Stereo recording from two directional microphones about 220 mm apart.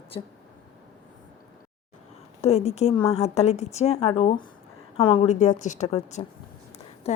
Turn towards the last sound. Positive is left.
turn(degrees=30)  # may be behind; listen again after turning